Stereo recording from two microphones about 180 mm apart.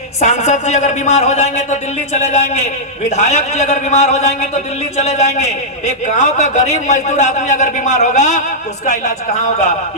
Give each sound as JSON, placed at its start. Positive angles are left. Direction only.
{"t": 0.2, "sound": "a man's voice", "side_deg": 40}